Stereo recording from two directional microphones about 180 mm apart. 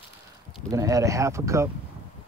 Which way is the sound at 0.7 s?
20° right (ahead or behind).